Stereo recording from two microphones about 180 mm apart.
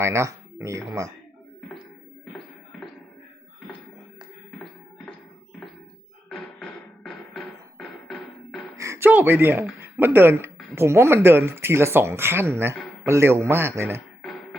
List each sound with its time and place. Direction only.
0.0 s speech: 15° right (ahead or behind)
6.2 s music: 5° left (ahead or behind)
8.7 s a sound: 15° right (ahead or behind)
9.8 s speech: 10° right (ahead or behind)